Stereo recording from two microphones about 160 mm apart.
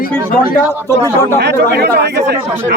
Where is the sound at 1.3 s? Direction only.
85° right.